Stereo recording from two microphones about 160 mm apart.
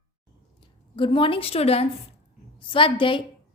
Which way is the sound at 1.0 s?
30° left (ahead or behind).